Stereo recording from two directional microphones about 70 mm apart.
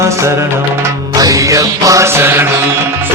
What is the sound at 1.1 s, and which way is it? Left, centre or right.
Music, right.